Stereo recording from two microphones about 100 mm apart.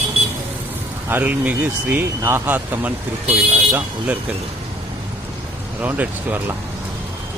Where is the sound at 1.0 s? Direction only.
20° right (ahead or behind).